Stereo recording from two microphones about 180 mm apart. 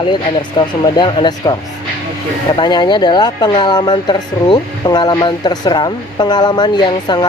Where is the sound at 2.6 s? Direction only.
25° left (ahead or behind).